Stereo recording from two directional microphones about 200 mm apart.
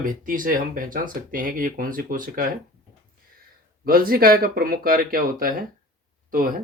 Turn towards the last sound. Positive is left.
turn(degrees=-45)  # may be behind; listen again after turning